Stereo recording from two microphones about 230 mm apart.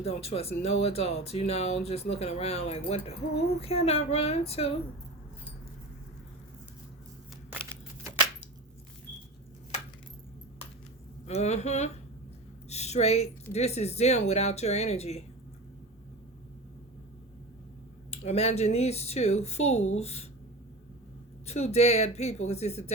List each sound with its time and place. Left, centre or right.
0.0 s speech: left
11.3 s a woman's voice: left
18.1 s speech: left
21.4 s speech: left